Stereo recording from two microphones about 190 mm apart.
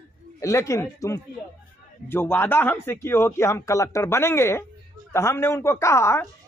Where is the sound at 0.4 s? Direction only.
15° left (ahead or behind).